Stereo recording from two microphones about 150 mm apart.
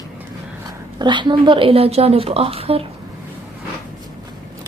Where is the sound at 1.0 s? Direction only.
30° right (ahead or behind).